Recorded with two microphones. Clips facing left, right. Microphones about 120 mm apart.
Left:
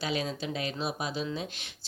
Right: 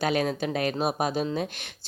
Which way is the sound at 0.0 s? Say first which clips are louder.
Right 7 dB; 55° right (ahead or behind).